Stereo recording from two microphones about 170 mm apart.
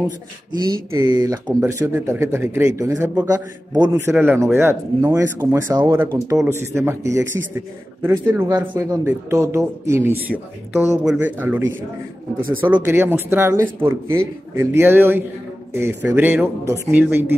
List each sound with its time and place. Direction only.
0.9 s a man's voice: 20° right (ahead or behind)